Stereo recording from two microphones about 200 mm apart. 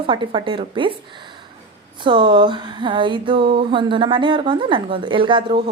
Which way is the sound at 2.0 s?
25° right (ahead or behind).